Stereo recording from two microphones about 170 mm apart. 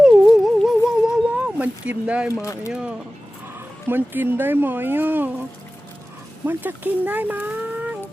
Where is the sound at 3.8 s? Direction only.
10° right (ahead or behind).